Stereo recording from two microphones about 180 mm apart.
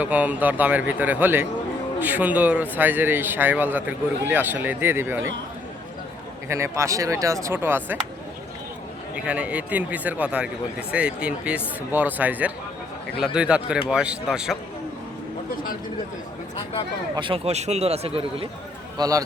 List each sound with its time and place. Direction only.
0.0 s a man's voice: 10° right (ahead or behind)
6.5 s a man's voice: 15° right (ahead or behind)
9.1 s a man's voice: 5° right (ahead or behind)
17.2 s speech: 30° right (ahead or behind)
18.9 s a man's voice: 20° right (ahead or behind)